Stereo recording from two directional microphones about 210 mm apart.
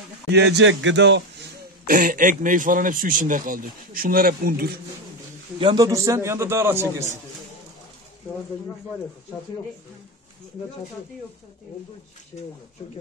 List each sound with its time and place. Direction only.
0.3 s a man's voice: 55° right (ahead or behind)
1.9 s a man's voice: 40° right (ahead or behind)
5.6 s a man's voice: 20° right (ahead or behind)